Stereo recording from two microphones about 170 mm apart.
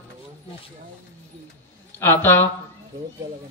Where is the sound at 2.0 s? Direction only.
10° left (ahead or behind).